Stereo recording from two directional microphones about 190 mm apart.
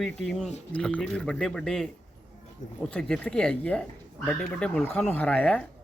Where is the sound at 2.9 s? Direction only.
5° left (ahead or behind).